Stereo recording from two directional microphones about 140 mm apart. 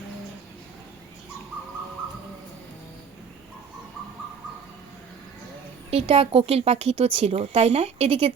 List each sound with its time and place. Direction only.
5.9 s speech: 45° right (ahead or behind)